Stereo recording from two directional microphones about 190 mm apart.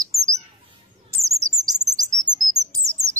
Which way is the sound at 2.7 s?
15° right (ahead or behind).